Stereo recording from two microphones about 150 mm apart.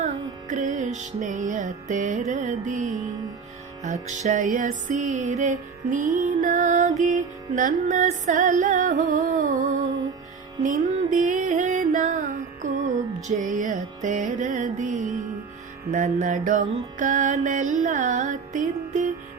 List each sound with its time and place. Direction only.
0.0 s music: 55° right (ahead or behind)
13.2 s music: 60° right (ahead or behind)